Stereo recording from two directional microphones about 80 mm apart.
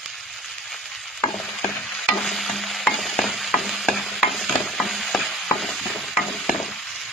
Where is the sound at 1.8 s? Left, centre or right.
Centre.